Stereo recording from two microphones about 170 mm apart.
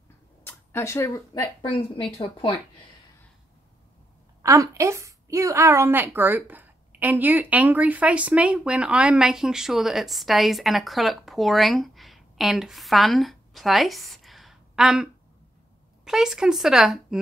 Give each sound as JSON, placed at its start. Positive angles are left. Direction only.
{"t": 0.4, "sound": "speech", "side_deg": 15}
{"t": 2.1, "sound": "speech", "side_deg": 30}
{"t": 4.4, "sound": "a woman's voice", "side_deg": -20}
{"t": 16.1, "sound": "a woman's voice", "side_deg": -5}